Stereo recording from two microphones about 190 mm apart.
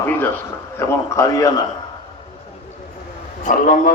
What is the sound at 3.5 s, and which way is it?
Speech, 45° left (ahead or behind).